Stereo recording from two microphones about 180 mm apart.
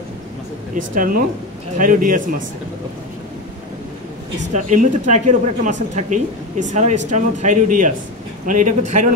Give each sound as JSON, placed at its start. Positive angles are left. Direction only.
{"t": 0.7, "sound": "speech", "side_deg": -50}
{"t": 4.6, "sound": "speech", "side_deg": -45}